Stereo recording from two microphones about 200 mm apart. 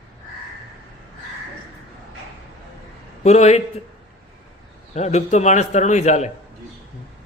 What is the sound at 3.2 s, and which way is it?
Speech, 35° left (ahead or behind).